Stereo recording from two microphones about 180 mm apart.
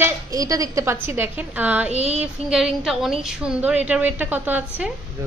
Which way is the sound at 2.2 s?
5° right (ahead or behind).